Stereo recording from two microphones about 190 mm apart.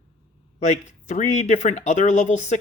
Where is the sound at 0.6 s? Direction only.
40° left (ahead or behind).